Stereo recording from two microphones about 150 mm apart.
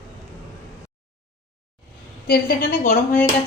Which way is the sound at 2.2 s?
85° left.